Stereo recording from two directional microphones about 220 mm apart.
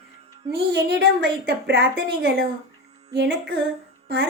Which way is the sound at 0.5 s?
50° right (ahead or behind).